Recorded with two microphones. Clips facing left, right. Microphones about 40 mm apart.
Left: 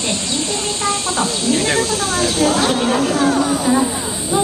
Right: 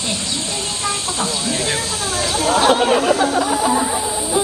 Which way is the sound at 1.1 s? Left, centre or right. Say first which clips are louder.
Left 4 dB; centre.